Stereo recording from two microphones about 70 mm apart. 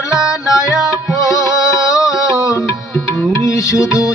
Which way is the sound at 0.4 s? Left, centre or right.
Left.